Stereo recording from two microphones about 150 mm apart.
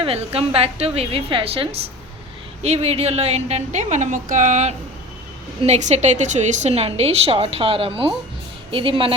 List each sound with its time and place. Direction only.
0.0 s a woman's voice: 40° right (ahead or behind)